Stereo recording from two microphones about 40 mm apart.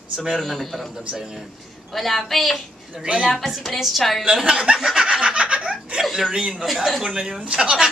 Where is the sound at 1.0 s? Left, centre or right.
Right.